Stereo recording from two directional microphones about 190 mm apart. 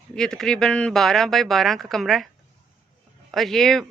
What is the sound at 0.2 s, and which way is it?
Speech, 5° left (ahead or behind).